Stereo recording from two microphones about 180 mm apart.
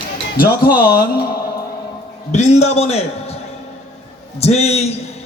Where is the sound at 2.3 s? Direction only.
40° left (ahead or behind).